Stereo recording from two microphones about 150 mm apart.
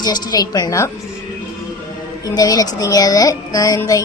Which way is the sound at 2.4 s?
25° left (ahead or behind).